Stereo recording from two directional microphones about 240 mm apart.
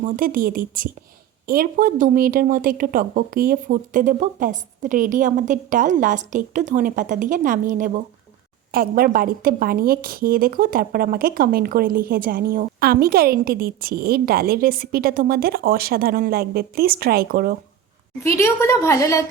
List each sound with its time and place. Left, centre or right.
0.0 s a woman's voice: right
18.2 s a woman's voice: centre